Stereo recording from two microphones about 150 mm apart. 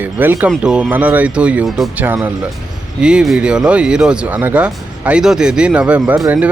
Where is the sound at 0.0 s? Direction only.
15° right (ahead or behind).